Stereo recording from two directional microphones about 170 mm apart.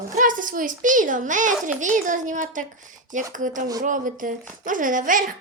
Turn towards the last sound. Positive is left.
turn(degrees=-50)  # may be behind; listen again after turning